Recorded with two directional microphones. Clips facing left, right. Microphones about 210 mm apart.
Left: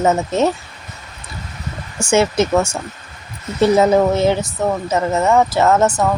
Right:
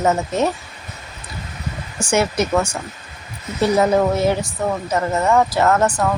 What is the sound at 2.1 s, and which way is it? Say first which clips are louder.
Speech: left 3 dB; 25° left (ahead or behind).